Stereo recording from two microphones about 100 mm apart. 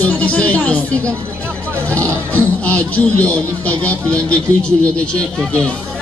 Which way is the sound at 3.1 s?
15° left (ahead or behind).